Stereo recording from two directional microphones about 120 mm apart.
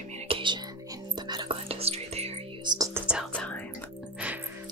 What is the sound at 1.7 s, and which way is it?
Whispering, 55° right (ahead or behind).